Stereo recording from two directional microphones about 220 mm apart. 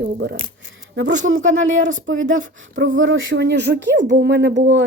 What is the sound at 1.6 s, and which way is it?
Speech, 35° right (ahead or behind).